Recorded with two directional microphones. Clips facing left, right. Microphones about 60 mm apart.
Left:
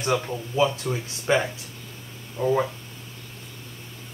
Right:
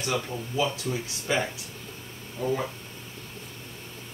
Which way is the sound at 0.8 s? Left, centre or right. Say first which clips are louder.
Left 5 dB; left.